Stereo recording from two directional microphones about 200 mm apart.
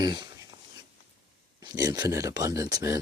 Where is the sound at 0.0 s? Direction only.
20° right (ahead or behind).